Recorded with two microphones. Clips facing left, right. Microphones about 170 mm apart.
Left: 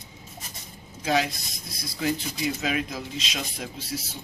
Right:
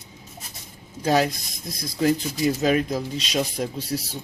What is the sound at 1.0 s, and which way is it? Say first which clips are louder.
Speech: right 4 dB; 45° right (ahead or behind).